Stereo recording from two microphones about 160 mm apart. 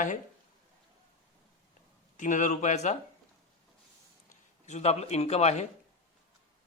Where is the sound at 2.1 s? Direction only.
50° left (ahead or behind).